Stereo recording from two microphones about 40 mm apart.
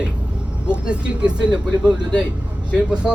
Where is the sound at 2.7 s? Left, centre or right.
Right.